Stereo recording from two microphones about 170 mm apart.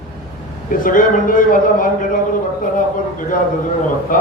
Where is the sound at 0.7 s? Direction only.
55° left (ahead or behind).